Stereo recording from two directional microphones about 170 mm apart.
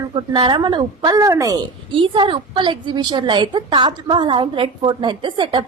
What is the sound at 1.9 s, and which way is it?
A woman's voice, 30° right (ahead or behind).